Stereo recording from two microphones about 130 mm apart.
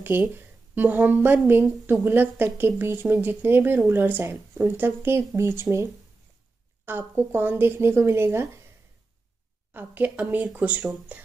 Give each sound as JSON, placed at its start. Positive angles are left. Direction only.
{"t": 0.1, "sound": "a woman's voice", "side_deg": -15}
{"t": 6.9, "sound": "a woman's voice", "side_deg": -15}
{"t": 9.8, "sound": "a woman's voice", "side_deg": -15}